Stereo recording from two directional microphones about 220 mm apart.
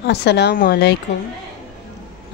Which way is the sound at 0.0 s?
50° left (ahead or behind).